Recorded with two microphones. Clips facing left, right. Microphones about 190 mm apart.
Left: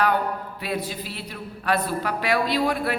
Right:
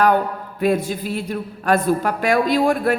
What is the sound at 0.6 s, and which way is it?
A woman's voice, 50° right (ahead or behind).